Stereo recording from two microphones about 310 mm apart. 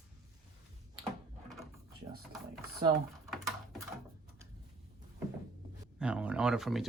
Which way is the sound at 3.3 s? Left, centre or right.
Centre.